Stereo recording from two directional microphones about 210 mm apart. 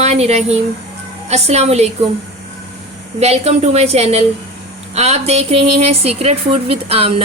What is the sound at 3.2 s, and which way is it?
A woman's voice, 30° right (ahead or behind).